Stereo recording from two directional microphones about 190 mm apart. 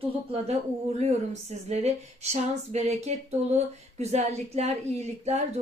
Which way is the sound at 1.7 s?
35° right (ahead or behind).